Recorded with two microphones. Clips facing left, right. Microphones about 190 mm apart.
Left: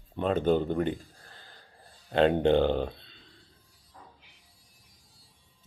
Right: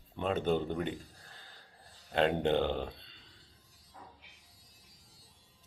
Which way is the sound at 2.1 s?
5° right (ahead or behind).